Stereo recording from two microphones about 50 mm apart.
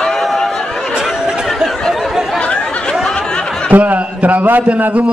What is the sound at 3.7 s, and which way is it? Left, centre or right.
A man's voice, right.